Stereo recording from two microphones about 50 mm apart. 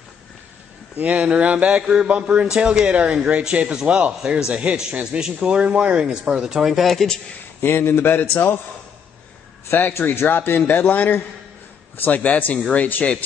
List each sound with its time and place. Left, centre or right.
0.9 s a man's voice: right; by 7.1 s centre
7.6 s a man's voice: left
9.7 s a man's voice: left